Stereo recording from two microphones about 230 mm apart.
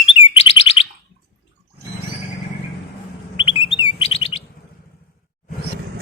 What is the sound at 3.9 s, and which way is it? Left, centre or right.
Chirp, left.